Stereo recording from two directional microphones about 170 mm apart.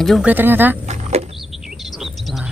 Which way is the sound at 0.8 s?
40° right (ahead or behind).